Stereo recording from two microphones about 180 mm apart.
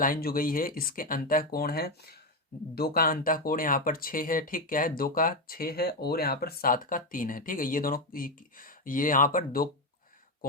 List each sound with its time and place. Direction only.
0.0 s speech: 55° left (ahead or behind)